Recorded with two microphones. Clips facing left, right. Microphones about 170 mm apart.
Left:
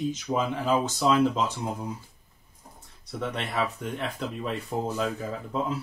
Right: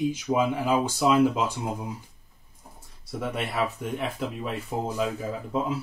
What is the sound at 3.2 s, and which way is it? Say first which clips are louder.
Speech: right 1 dB; 10° right (ahead or behind).